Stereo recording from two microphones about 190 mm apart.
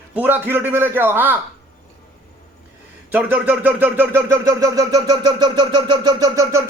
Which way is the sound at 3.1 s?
10° right (ahead or behind).